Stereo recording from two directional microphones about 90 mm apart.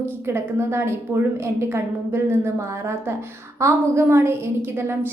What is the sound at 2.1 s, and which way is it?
Speech, 25° right (ahead or behind).